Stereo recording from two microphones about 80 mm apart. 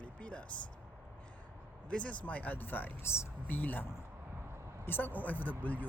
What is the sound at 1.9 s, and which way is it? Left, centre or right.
Speech, centre.